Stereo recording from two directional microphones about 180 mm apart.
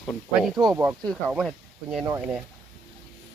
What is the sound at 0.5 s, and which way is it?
Speech, 20° right (ahead or behind).